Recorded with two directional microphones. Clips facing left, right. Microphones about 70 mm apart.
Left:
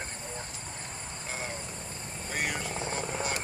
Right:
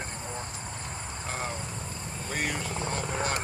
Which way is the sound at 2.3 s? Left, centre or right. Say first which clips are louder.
Right 1 dB; centre.